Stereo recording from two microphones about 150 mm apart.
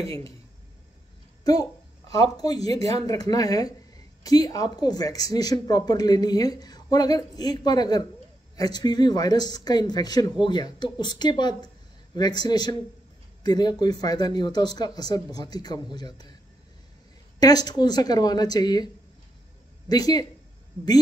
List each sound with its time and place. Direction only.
1.4 s a child's voice: 25° left (ahead or behind)
17.4 s speech: 25° left (ahead or behind)
19.9 s speech: 25° left (ahead or behind)